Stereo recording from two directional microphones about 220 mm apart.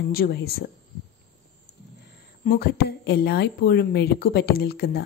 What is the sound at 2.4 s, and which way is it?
A woman's voice, 45° left (ahead or behind).